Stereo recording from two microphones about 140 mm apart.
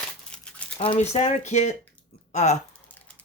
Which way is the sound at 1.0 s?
50° left (ahead or behind).